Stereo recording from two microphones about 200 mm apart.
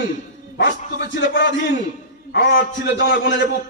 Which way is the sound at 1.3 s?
65° left (ahead or behind).